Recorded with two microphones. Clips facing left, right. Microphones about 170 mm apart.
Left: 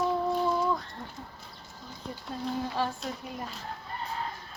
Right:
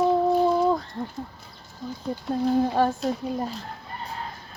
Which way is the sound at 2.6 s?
50° right (ahead or behind).